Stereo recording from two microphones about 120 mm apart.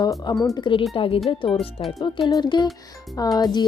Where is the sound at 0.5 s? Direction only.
40° left (ahead or behind).